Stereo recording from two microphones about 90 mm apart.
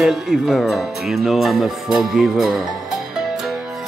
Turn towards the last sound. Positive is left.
turn(degrees=-5)  # may be behind; listen again after turning